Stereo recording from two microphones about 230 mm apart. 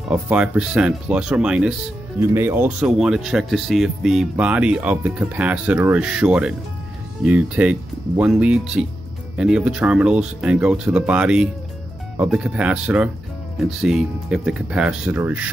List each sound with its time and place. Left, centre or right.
0.1 s speech: centre